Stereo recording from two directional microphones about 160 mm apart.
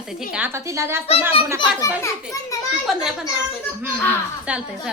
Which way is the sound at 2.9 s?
Centre (ahead or behind).